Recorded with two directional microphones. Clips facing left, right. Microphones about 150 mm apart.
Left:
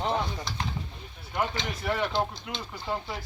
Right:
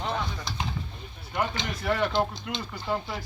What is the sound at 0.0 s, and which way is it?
Stir, 25° left (ahead or behind).